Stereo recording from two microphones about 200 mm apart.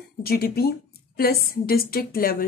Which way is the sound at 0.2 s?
50° left (ahead or behind).